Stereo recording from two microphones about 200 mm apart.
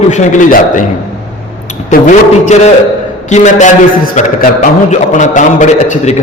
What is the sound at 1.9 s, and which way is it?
A man's voice, 35° left (ahead or behind).